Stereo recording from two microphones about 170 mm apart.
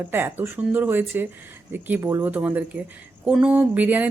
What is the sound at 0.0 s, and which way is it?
Speech, 10° right (ahead or behind).